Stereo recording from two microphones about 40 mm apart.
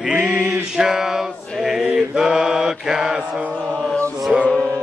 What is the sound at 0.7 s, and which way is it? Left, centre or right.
Male singing, centre.